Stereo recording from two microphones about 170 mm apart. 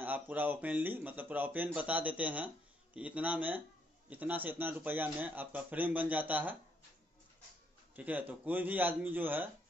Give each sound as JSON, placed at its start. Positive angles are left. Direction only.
{"t": 0.0, "sound": "speech", "side_deg": -10}
{"t": 7.9, "sound": "speech", "side_deg": -10}